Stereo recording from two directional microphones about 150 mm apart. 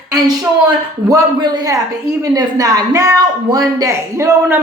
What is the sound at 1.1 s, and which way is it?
Speech, 30° right (ahead or behind).